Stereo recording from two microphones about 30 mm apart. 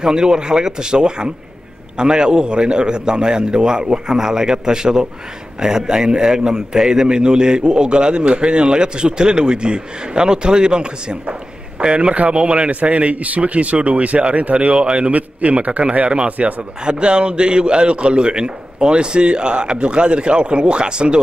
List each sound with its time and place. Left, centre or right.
0.0 s a man's voice: right
14.8 s speech: right
16.8 s a man's voice: right